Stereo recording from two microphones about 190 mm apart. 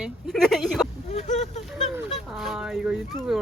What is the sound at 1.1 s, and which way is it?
Speech, 40° left (ahead or behind).